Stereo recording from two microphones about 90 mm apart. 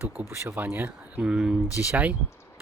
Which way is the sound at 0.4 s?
25° right (ahead or behind).